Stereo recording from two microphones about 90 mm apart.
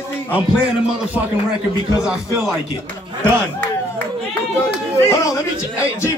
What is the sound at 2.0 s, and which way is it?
Speech, 5° right (ahead or behind).